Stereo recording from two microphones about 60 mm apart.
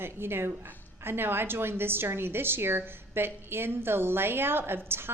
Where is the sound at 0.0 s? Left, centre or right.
Right.